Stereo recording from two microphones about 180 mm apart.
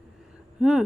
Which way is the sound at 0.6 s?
5° right (ahead or behind).